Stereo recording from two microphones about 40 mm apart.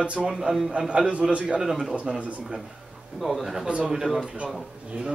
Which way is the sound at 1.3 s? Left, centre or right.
Right.